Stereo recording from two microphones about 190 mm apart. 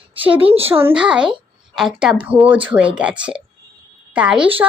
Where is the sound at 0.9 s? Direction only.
5° right (ahead or behind).